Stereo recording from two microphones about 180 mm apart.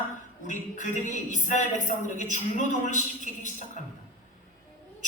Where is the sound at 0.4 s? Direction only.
45° left (ahead or behind).